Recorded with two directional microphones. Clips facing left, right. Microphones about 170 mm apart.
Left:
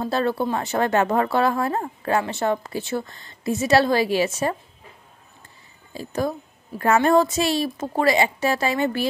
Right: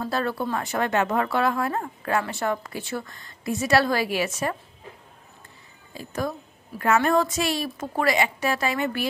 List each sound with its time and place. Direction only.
0.0 s speech: 25° left (ahead or behind)
5.9 s speech: 30° left (ahead or behind)